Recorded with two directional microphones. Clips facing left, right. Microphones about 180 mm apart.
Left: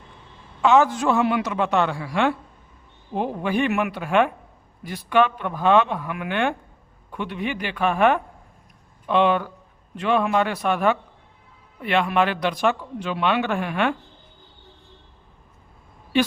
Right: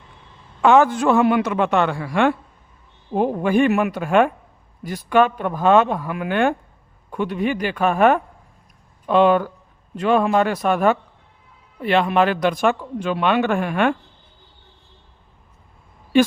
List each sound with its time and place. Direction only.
0.6 s a man's voice: 55° right (ahead or behind)
16.1 s a woman's voice: 50° right (ahead or behind)